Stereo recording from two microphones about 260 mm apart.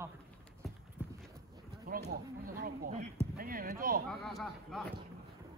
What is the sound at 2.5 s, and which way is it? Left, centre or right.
Speech, right.